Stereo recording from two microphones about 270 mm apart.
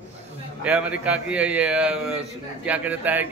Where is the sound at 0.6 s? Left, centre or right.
Centre.